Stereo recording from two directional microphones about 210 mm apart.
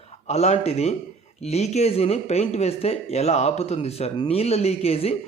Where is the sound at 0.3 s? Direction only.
30° left (ahead or behind).